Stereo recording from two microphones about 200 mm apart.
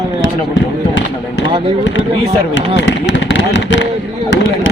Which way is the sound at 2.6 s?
65° left (ahead or behind).